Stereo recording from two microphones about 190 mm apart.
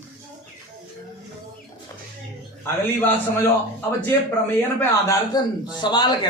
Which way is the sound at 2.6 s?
10° left (ahead or behind).